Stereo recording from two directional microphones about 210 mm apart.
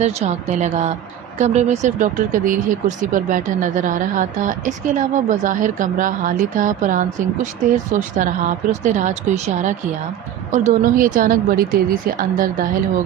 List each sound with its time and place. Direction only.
0.0 s speech: 35° right (ahead or behind)